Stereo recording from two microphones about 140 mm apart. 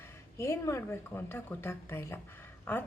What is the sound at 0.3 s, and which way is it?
A woman's voice, 20° left (ahead or behind).